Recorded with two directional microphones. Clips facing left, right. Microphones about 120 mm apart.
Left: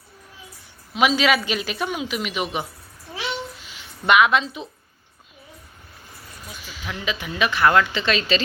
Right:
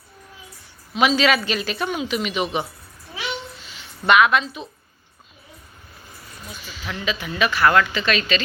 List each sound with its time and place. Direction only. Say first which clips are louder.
0.9 s speech: right 1 dB; 10° left (ahead or behind)
3.6 s a sound: right 1 dB; 10° left (ahead or behind)
6.7 s speech: right 1 dB; 10° left (ahead or behind)